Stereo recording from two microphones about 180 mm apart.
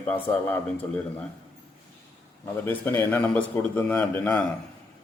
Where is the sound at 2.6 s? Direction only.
10° left (ahead or behind).